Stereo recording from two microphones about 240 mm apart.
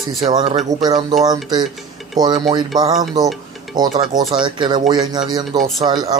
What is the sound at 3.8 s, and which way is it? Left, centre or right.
Speech, centre.